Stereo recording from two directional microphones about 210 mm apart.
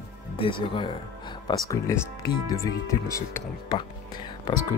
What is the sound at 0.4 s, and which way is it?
Speech, 25° left (ahead or behind).